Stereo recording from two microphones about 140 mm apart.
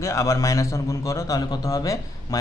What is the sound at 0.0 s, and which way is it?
A man's voice, 20° left (ahead or behind).